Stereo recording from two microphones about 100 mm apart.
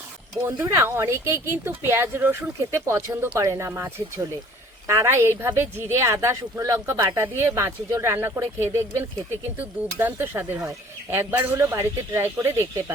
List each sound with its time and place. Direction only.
0.4 s speech: 25° right (ahead or behind)
10.6 s speech: 30° right (ahead or behind)